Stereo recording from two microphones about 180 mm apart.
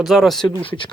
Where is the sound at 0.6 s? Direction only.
30° left (ahead or behind).